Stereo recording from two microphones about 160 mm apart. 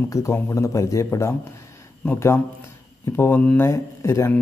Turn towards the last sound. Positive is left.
turn(degrees=15)  # may be behind; listen again after turning